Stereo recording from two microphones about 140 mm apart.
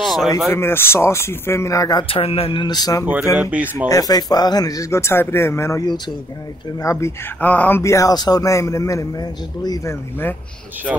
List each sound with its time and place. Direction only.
0.0 s a sound: centre (ahead or behind)
0.5 s a man's voice: 15° left (ahead or behind)
2.0 s speech: 45° left (ahead or behind); by 3.1 s 25° left (ahead or behind)
3.3 s speech: 10° right (ahead or behind)
3.9 s a man's voice: 30° left (ahead or behind)
10.9 s speech: 5° right (ahead or behind)